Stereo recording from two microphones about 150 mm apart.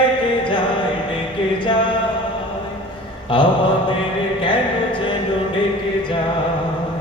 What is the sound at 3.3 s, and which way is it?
Mantra, 35° left (ahead or behind).